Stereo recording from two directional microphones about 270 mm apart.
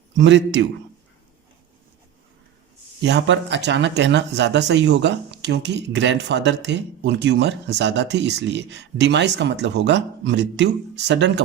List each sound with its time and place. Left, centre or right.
0.2 s speech: right
3.0 s speech: right